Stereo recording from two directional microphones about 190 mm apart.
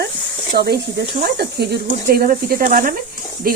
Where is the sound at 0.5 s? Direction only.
60° right (ahead or behind).